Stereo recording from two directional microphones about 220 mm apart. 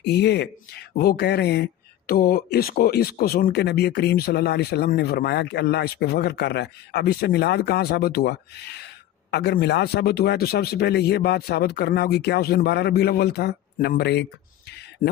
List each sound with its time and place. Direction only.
0.0 s speech: 50° left (ahead or behind)